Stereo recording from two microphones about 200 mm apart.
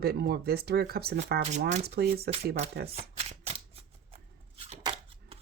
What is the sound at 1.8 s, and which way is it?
Speech, 55° right (ahead or behind).